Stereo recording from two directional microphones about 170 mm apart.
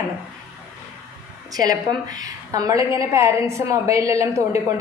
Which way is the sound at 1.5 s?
25° right (ahead or behind).